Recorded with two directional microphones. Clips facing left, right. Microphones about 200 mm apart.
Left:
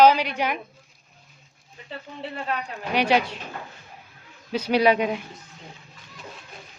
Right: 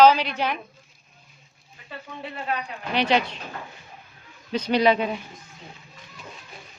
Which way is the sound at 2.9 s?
10° left (ahead or behind).